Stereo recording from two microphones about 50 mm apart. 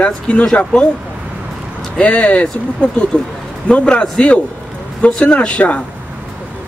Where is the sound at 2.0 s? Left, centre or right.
Left.